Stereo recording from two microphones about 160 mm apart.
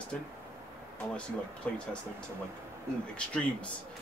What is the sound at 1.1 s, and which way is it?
Speech, 5° left (ahead or behind).